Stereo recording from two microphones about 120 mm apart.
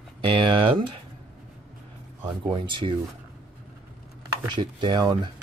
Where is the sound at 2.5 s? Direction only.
45° right (ahead or behind).